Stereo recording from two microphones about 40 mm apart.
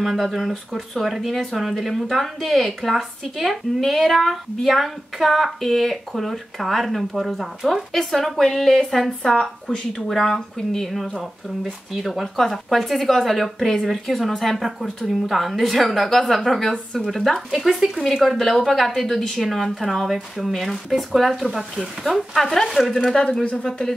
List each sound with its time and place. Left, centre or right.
0.0 s speech: centre
17.5 s speech: centre